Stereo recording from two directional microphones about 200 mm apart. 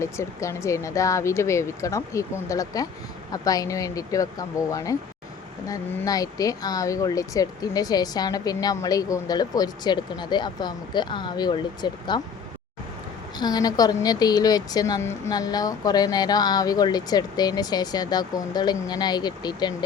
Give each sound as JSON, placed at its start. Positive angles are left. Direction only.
{"t": 0.0, "sound": "speech", "side_deg": 15}
{"t": 13.3, "sound": "speech", "side_deg": 20}